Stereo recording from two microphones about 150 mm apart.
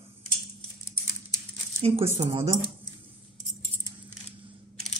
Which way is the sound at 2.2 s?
40° right (ahead or behind).